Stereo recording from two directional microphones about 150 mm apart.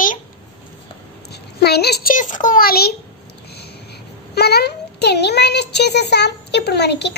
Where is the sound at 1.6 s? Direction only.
90° left.